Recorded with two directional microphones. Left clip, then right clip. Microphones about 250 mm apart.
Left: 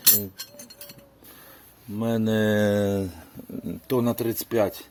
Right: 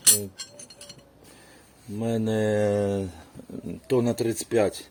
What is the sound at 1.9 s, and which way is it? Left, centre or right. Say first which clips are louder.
Speech: left 2 dB; left.